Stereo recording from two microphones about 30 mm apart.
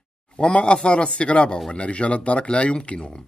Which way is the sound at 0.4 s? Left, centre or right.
Left.